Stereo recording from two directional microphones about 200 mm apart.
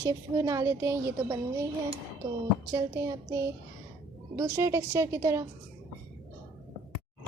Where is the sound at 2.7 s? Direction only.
20° right (ahead or behind).